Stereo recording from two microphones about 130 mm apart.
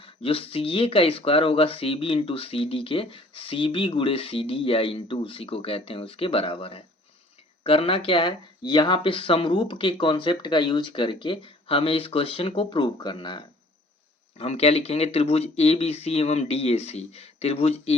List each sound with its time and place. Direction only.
0.0 s speech: 45° left (ahead or behind)
14.3 s speech: 50° left (ahead or behind)